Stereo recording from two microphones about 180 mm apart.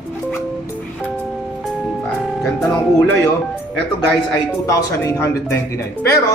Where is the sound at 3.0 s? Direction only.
15° left (ahead or behind).